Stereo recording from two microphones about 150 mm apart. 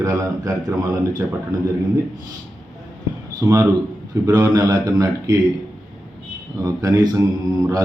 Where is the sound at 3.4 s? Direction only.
15° right (ahead or behind).